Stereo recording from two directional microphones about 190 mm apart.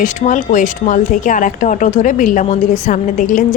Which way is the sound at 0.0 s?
40° left (ahead or behind).